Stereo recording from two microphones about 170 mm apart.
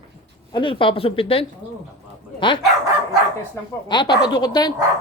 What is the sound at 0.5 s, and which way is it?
Speech, 30° left (ahead or behind).